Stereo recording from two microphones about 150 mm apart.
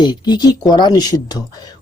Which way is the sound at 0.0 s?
30° left (ahead or behind).